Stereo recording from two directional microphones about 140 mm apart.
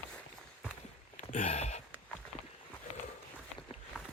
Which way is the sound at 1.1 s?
60° left (ahead or behind).